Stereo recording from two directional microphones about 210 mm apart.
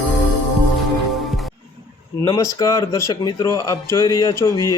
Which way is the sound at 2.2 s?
20° left (ahead or behind).